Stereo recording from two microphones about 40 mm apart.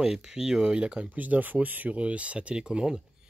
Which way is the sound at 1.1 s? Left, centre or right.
Right.